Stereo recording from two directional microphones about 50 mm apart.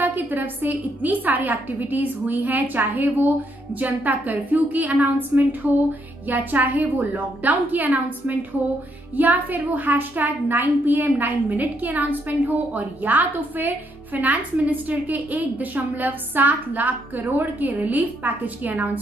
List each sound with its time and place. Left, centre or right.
0.0 s a woman's voice: right